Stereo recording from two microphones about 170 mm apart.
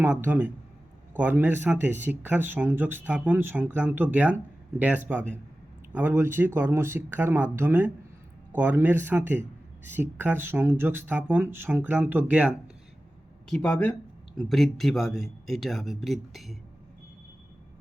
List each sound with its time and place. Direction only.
0.0 s a man's voice: 10° right (ahead or behind)
13.5 s speech: 5° left (ahead or behind)